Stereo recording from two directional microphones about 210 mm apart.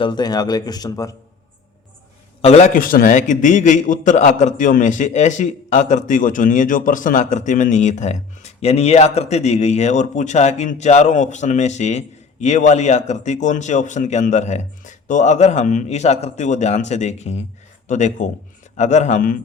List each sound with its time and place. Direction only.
0.0 s a man's voice: 20° left (ahead or behind)
2.4 s a man's voice: 30° left (ahead or behind)